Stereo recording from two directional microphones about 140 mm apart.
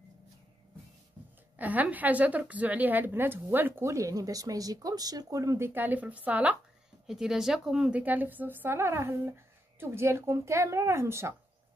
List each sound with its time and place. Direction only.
1.6 s a woman's voice: 10° right (ahead or behind)